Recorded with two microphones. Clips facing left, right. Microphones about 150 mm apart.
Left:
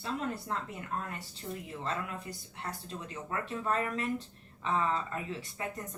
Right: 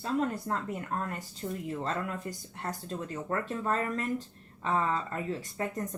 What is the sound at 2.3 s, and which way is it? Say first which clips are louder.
Speech: right 4 dB; 50° right (ahead or behind).